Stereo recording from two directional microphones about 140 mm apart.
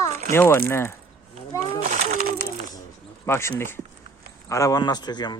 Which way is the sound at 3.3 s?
20° left (ahead or behind).